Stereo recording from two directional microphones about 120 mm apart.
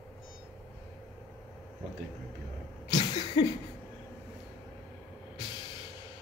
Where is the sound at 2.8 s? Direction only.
40° left (ahead or behind).